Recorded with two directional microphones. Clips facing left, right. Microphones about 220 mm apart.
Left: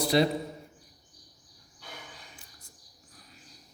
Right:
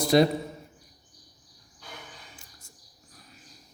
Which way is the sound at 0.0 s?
45° right (ahead or behind).